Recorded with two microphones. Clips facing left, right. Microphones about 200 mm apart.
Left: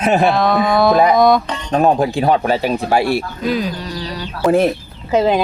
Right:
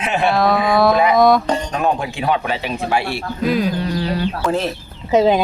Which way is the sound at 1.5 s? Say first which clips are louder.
Right 6 dB; 45° right (ahead or behind).